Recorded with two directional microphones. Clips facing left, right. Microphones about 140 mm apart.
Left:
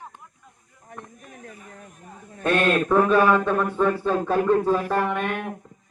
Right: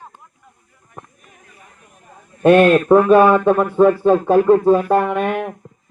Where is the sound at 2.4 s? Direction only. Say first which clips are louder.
Right 10 dB; 45° right (ahead or behind).